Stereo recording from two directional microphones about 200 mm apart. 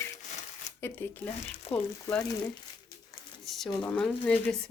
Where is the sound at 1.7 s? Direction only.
30° left (ahead or behind).